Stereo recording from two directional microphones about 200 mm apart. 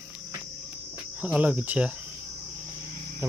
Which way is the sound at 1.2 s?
5° right (ahead or behind).